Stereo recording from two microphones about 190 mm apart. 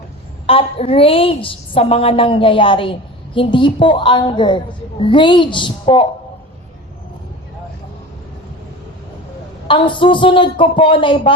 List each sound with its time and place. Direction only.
0.4 s a woman's voice: 30° left (ahead or behind)
9.6 s a woman's voice: 25° left (ahead or behind)